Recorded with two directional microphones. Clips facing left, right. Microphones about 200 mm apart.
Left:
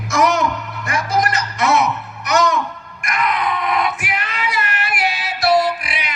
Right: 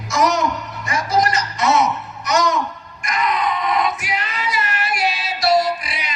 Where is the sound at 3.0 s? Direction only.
55° left (ahead or behind).